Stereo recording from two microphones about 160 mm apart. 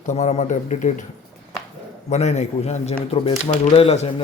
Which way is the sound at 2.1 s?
45° left (ahead or behind).